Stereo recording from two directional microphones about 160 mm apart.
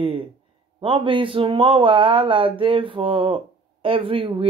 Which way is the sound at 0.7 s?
35° right (ahead or behind).